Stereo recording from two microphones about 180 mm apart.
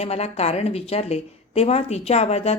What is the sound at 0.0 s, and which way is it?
Speech, 35° left (ahead or behind).